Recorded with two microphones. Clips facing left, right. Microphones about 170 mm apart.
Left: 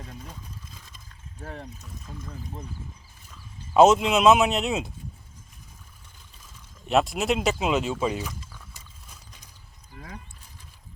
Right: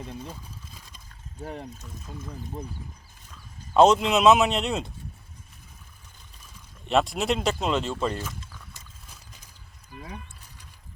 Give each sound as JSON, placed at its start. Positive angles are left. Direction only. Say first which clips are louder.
{"t": 1.4, "sound": "speech", "louder": "right 3 dB", "side_deg": -15}
{"t": 3.8, "sound": "speech", "louder": "left 1 dB", "side_deg": 5}
{"t": 6.8, "sound": "speech", "louder": "left 1 dB", "side_deg": 0}